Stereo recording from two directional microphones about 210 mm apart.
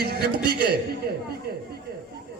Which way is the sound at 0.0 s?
50° right (ahead or behind).